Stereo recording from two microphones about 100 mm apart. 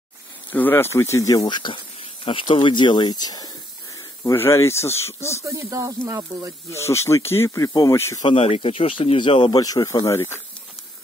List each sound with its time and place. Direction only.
0.5 s speech: 20° left (ahead or behind); by 3.5 s 40° left (ahead or behind)
4.4 s speech: 25° left (ahead or behind)
5.4 s speech: 35° right (ahead or behind)
6.7 s speech: 30° left (ahead or behind)
8.4 s speech: 85° left; by 9.6 s 55° left (ahead or behind)
9.6 s speech: 40° left (ahead or behind)
10.0 s speech: 25° left (ahead or behind)